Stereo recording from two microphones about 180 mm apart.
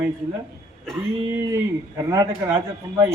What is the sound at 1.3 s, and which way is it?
A man's voice, 15° right (ahead or behind).